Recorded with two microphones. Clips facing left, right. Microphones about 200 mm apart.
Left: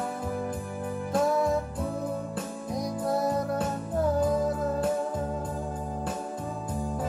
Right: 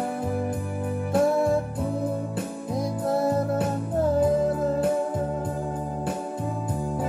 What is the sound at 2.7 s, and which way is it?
Music, 25° right (ahead or behind).